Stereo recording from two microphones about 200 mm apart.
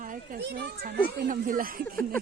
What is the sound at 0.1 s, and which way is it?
A child's voice, 55° right (ahead or behind).